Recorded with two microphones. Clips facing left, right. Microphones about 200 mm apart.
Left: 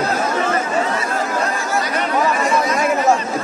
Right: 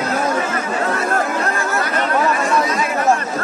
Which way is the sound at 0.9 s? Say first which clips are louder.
Right 2 dB; 60° right (ahead or behind).